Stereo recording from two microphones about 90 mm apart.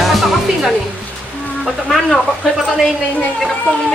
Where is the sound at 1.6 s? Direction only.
Centre (ahead or behind).